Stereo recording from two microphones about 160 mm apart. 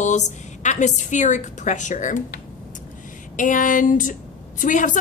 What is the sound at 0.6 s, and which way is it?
A woman's voice, 50° left (ahead or behind).